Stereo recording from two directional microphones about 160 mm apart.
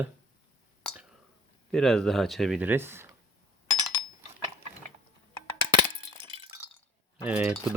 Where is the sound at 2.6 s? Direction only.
10° right (ahead or behind).